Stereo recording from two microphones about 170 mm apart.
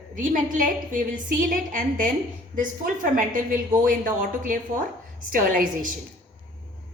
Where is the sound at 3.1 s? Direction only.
55° right (ahead or behind).